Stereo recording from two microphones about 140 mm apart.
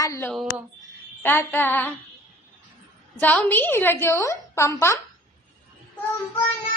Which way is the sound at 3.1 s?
10° left (ahead or behind).